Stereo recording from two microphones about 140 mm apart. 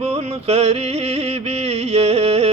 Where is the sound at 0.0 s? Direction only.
45° right (ahead or behind).